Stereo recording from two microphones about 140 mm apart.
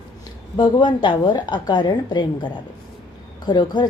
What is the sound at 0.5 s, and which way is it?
A woman's voice, 35° left (ahead or behind).